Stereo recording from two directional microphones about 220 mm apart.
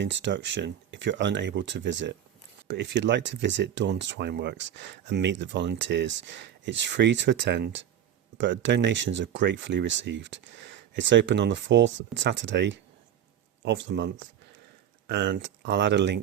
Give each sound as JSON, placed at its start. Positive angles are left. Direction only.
{"t": 0.0, "sound": "speech", "side_deg": -55}